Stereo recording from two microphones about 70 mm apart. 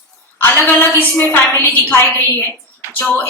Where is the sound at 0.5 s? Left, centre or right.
Left.